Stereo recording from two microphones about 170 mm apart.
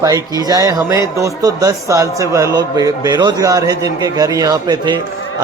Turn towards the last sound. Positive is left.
turn(degrees=-25)  # may be behind; listen again after turning